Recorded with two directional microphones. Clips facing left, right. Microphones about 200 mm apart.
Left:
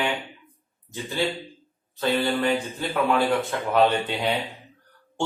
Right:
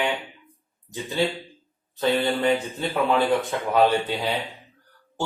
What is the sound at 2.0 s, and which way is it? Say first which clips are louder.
Speech: right 1 dB; 20° right (ahead or behind).